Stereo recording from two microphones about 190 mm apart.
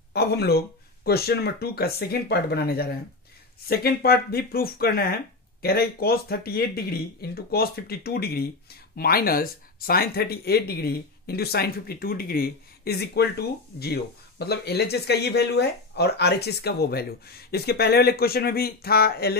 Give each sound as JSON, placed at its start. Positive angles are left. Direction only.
{"t": 0.1, "sound": "speech", "side_deg": 60}